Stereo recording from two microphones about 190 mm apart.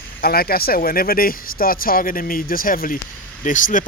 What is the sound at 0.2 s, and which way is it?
Speech, 50° left (ahead or behind).